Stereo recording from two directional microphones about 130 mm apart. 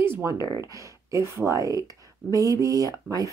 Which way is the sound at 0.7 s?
25° right (ahead or behind).